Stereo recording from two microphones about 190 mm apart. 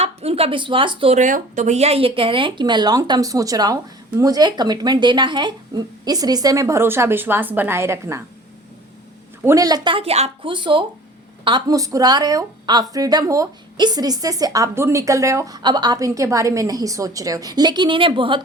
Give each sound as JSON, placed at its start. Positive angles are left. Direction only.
{"t": 0.0, "sound": "a woman's voice", "side_deg": -30}
{"t": 1.2, "sound": "a woman's voice", "side_deg": -40}
{"t": 9.4, "sound": "a woman's voice", "side_deg": -15}